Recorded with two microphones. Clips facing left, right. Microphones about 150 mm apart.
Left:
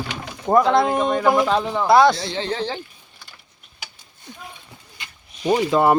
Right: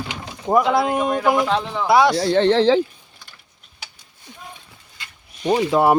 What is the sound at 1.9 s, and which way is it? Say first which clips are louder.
Speech: left 1 dB; 5° right (ahead or behind).